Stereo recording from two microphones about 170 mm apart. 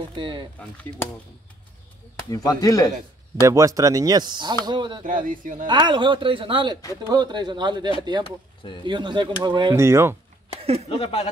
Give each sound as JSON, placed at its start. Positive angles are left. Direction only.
{"t": 0.1, "sound": "speech", "side_deg": -30}
{"t": 0.6, "sound": "speech", "side_deg": 10}
{"t": 2.2, "sound": "speech", "side_deg": 20}
{"t": 3.4, "sound": "speech", "side_deg": -20}
{"t": 5.0, "sound": "speech", "side_deg": -50}
{"t": 5.7, "sound": "speech", "side_deg": -25}
{"t": 8.2, "sound": "speech", "side_deg": 30}
{"t": 8.8, "sound": "speech", "side_deg": -25}
{"t": 9.8, "sound": "speech", "side_deg": -15}
{"t": 10.6, "sound": "speech", "side_deg": -35}
{"t": 10.9, "sound": "speech", "side_deg": 35}